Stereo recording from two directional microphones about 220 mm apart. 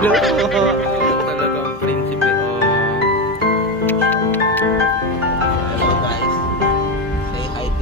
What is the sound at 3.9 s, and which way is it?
Music, 10° left (ahead or behind).